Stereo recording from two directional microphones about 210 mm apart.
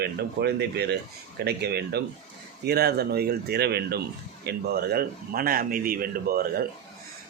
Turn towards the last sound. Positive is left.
turn(degrees=-45)  # may be behind; listen again after turning